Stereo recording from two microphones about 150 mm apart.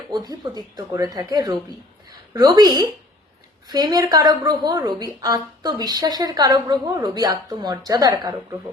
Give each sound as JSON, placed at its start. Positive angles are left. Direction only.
{"t": 0.1, "sound": "a woman's voice", "side_deg": -25}